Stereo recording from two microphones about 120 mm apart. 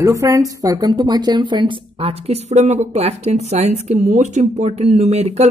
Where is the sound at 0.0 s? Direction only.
25° right (ahead or behind).